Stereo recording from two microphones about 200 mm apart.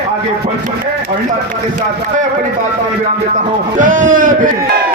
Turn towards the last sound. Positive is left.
turn(degrees=-40)  # may be behind; listen again after turning